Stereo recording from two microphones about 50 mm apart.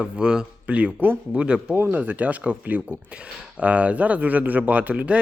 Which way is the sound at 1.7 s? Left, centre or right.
Right.